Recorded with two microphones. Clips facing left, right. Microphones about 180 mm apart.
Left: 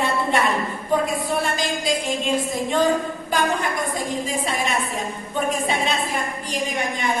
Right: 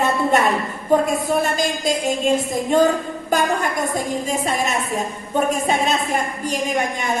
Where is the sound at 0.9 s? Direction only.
45° right (ahead or behind).